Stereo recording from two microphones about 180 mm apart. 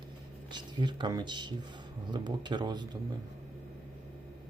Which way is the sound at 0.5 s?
25° right (ahead or behind).